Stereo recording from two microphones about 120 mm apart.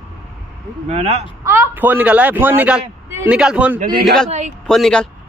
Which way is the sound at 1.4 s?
15° right (ahead or behind).